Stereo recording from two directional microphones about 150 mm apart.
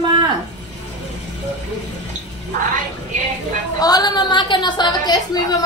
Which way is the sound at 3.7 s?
25° left (ahead or behind).